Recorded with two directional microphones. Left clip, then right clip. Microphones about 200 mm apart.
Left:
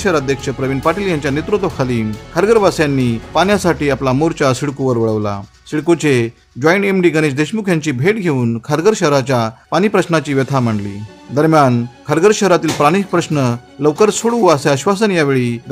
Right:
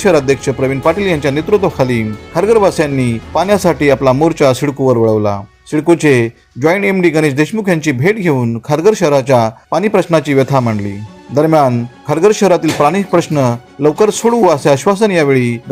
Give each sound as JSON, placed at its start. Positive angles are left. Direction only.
{"t": 0.0, "sound": "speech", "side_deg": 0}